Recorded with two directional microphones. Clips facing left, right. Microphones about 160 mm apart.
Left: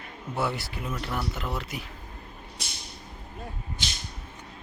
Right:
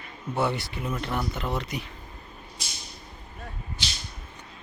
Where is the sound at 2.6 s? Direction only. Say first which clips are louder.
Left 1 dB; 60° left (ahead or behind).